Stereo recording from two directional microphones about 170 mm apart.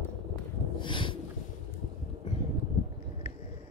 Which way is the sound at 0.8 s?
30° left (ahead or behind).